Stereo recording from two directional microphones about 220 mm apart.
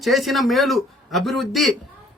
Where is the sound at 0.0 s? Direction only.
Centre (ahead or behind).